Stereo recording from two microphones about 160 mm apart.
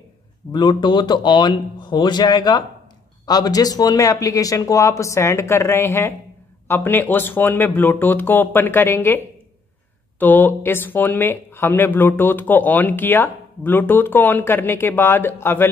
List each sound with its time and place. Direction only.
0.5 s speech: 30° left (ahead or behind)